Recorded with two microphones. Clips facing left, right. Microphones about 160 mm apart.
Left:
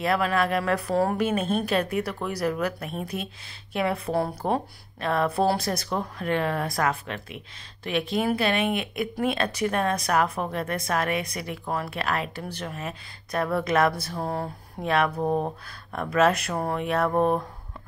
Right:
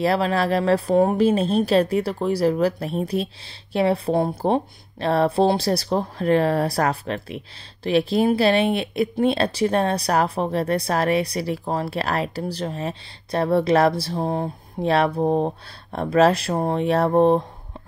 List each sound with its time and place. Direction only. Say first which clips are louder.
0.0 s speech: right 4 dB; 30° right (ahead or behind)